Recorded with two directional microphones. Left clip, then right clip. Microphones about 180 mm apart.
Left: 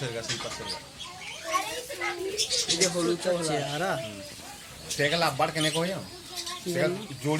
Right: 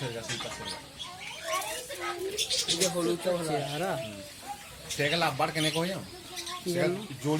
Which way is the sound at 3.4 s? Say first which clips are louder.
Left 2 dB; centre (ahead or behind).